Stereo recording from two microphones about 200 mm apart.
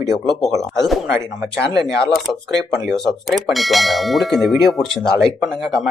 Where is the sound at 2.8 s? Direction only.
Centre (ahead or behind).